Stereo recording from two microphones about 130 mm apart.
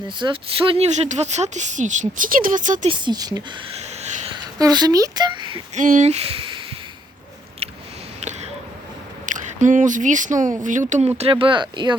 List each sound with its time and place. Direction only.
0.2 s speech: 40° right (ahead or behind)
1.0 s speech: 65° right (ahead or behind); by 2.8 s 85° right
2.8 s speech: 35° right (ahead or behind)
4.5 s speech: 30° right (ahead or behind)
5.7 s speech: 80° right; by 6.6 s 45° right (ahead or behind)
9.2 s speech: 80° right
11.2 s speech: 45° right (ahead or behind)